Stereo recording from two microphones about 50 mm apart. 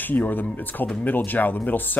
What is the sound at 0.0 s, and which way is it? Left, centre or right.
Speech, left.